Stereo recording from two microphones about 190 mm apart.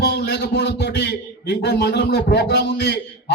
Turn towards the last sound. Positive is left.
turn(degrees=65)  # may be behind; listen again after turning